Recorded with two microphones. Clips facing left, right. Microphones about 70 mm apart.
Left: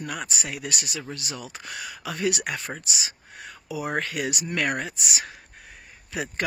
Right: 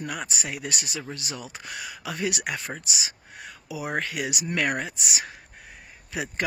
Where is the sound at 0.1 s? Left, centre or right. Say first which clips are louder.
Even; right.